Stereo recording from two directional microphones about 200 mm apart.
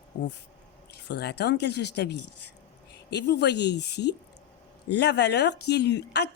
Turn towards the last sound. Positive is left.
turn(degrees=55)  # may be behind; listen again after turning